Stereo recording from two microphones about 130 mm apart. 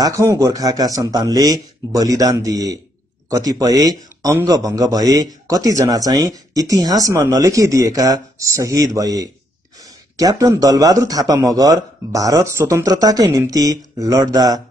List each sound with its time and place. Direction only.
0.0 s a man's voice: 25° right (ahead or behind)